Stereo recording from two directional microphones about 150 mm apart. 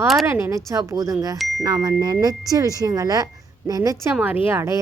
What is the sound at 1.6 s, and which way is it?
A woman's voice, 25° right (ahead or behind).